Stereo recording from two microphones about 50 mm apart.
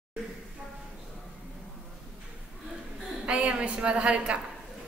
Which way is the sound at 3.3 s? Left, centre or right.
Right.